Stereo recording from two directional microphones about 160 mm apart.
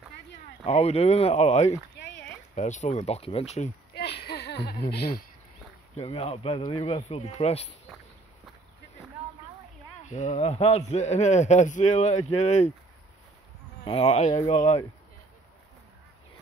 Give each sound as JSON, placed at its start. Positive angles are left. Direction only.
{"t": 0.7, "sound": "speech", "side_deg": 40}
{"t": 3.9, "sound": "a sound", "side_deg": 90}
{"t": 5.9, "sound": "speech", "side_deg": 40}
{"t": 10.0, "sound": "speech", "side_deg": 45}
{"t": 13.8, "sound": "speech", "side_deg": 40}